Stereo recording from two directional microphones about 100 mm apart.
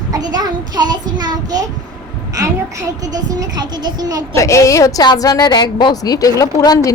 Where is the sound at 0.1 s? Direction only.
45° right (ahead or behind).